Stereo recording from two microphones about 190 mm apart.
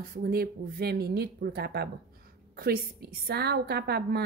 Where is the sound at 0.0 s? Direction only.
50° right (ahead or behind).